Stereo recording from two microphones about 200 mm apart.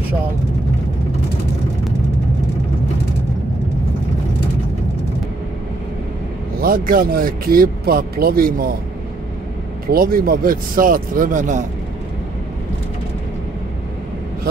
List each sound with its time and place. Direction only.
6.6 s speech: 45° right (ahead or behind)
9.8 s speech: 45° right (ahead or behind)